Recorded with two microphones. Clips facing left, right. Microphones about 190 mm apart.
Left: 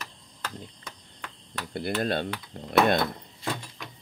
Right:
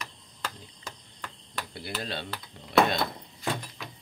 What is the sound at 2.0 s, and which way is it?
Speech, 50° left (ahead or behind).